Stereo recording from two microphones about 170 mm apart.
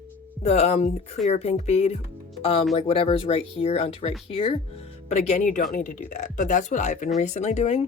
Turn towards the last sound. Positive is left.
turn(degrees=40)  # may be behind; listen again after turning